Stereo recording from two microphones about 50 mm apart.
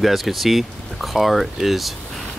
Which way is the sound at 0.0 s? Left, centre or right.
Centre.